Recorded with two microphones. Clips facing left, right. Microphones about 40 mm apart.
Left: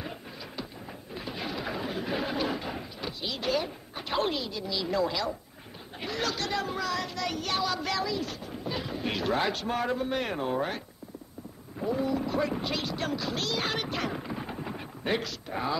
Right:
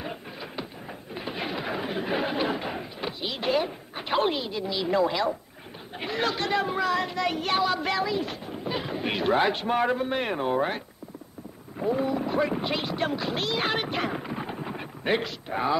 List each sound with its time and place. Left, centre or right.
0.0 s music: right
1.1 s a sound: right
5.9 s speech: right
11.8 s speech: right